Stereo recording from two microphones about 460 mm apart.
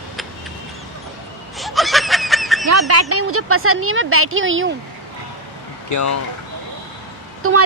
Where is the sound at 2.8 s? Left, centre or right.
Right.